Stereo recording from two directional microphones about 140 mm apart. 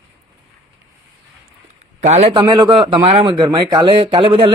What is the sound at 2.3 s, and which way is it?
A man's voice, 30° right (ahead or behind).